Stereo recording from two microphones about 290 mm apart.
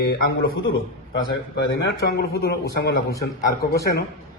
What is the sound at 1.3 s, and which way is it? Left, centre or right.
A man's voice, left.